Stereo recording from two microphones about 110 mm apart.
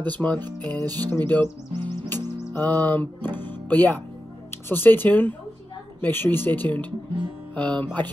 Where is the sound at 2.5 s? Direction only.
15° left (ahead or behind).